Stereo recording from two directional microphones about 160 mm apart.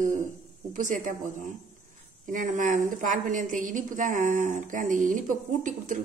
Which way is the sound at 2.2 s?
55° right (ahead or behind).